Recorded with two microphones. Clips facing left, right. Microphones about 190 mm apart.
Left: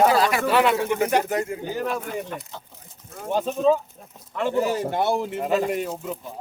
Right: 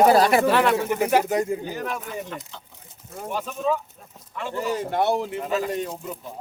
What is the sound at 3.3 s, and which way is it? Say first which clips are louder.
Speech: left 6 dB; 30° left (ahead or behind).